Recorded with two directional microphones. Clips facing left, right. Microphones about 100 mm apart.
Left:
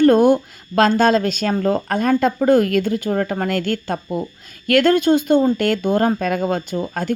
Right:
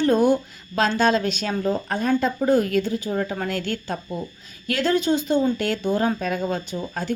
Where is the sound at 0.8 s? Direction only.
45° left (ahead or behind).